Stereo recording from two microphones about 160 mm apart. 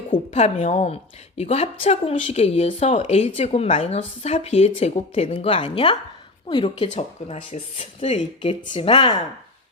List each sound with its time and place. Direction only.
0.1 s a woman's voice: 45° left (ahead or behind)